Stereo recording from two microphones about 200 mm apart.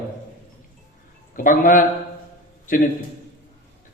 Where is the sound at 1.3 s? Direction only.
40° left (ahead or behind).